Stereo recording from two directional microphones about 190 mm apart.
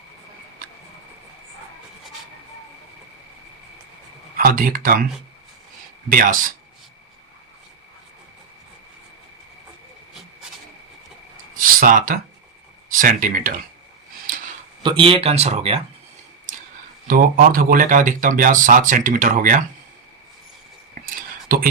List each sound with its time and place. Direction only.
4.4 s speech: 50° right (ahead or behind)
6.1 s speech: 45° right (ahead or behind)
11.5 s a sound: 45° right (ahead or behind)
12.9 s speech: 45° right (ahead or behind)
14.8 s speech: 25° right (ahead or behind)
17.1 s speech: 50° right (ahead or behind)
21.0 s a sound: 50° right (ahead or behind)